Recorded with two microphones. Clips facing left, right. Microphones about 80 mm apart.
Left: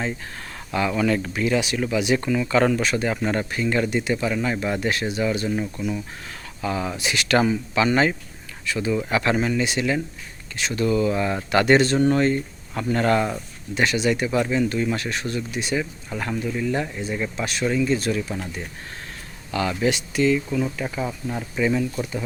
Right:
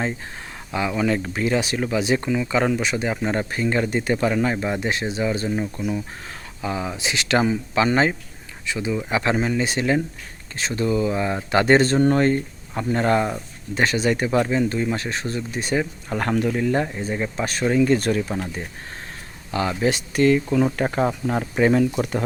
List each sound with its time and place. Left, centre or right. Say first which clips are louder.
0.7 s speech: even; centre; by 4.5 s right
4.5 s speech: even; right
11.5 s speech: right 1 dB; right
12.7 s speech: right 1 dB; right
13.7 s speech: right 1 dB; right
16.6 s speech: right 3 dB; right
16.8 s speech: right 2 dB; right
19.5 s speech: right 1 dB; right
20.1 s speech: right 5 dB; right